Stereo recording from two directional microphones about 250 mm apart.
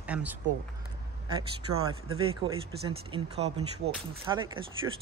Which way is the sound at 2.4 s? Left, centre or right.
Centre.